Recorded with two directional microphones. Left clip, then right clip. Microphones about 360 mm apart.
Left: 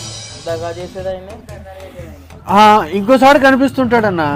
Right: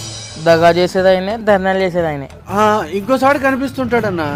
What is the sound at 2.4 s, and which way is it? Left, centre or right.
Speech, left.